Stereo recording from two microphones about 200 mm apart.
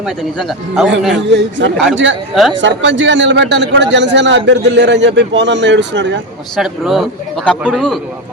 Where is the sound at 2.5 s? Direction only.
65° right (ahead or behind).